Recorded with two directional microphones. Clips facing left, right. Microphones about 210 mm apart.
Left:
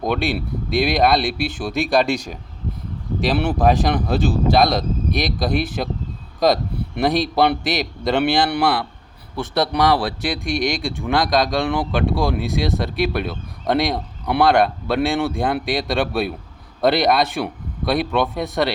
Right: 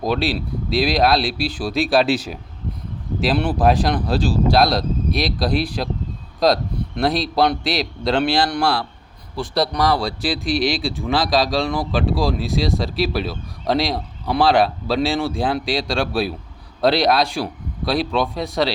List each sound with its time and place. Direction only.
0.0 s speech: centre (ahead or behind)